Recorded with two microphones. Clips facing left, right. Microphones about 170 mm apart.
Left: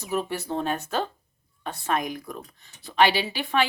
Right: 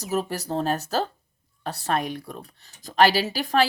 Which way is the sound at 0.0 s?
40° right (ahead or behind).